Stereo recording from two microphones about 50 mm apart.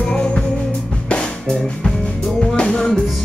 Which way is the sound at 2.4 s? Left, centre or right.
Centre.